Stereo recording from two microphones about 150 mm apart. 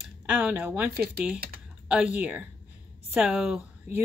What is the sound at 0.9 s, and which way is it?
Speech, 90° right.